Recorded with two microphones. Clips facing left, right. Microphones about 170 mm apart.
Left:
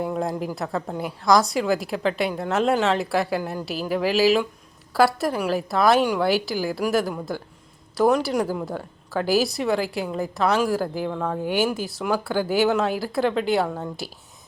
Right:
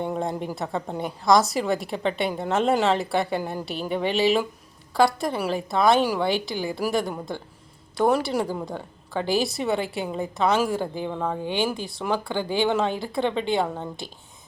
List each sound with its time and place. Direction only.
0.0 s a woman's voice: centre (ahead or behind)
11.4 s a woman's voice: 5° left (ahead or behind)